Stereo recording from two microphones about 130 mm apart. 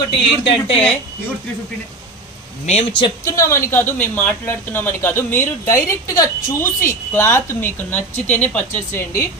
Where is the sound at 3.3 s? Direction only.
25° left (ahead or behind).